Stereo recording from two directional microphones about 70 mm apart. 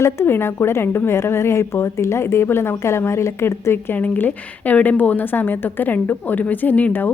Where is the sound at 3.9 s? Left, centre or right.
Left.